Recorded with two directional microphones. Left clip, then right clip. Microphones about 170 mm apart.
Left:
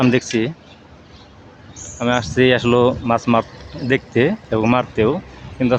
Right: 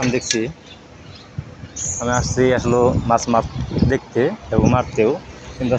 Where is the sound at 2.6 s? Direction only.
35° left (ahead or behind).